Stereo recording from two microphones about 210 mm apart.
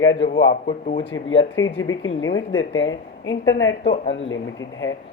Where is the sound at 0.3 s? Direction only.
60° left (ahead or behind).